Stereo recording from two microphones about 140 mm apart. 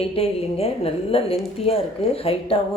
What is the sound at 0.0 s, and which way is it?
A woman's voice, 45° left (ahead or behind).